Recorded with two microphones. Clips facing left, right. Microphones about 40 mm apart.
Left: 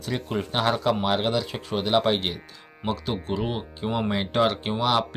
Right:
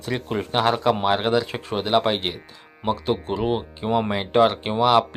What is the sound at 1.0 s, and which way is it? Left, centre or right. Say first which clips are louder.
Speech: right 4 dB; centre.